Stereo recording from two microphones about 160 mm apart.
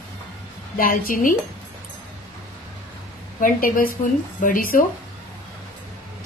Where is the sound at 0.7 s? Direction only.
60° left (ahead or behind).